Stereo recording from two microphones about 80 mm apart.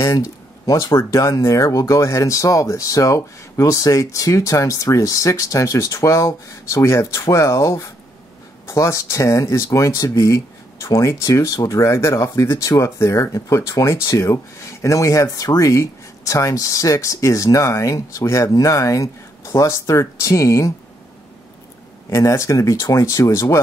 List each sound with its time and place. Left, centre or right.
0.7 s speech: left
22.1 s speech: left